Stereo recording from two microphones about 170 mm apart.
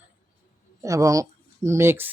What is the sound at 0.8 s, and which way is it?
Speech, 20° right (ahead or behind).